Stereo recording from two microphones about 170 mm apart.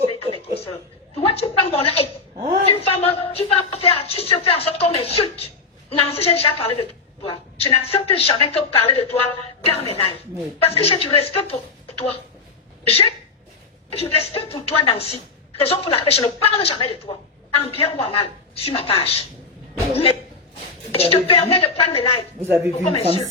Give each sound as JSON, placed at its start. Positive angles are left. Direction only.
{"t": 1.1, "sound": "a woman's voice", "side_deg": 35}
{"t": 22.4, "sound": "speech", "side_deg": -15}
{"t": 22.8, "sound": "a woman's voice", "side_deg": 35}